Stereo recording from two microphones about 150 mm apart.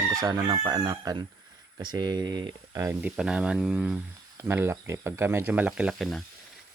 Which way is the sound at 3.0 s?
5° right (ahead or behind).